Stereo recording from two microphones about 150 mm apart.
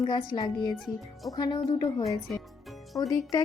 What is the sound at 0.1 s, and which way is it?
Speech, 30° left (ahead or behind).